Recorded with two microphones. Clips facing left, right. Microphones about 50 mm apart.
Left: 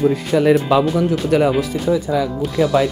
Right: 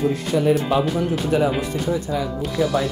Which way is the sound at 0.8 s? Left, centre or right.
Left.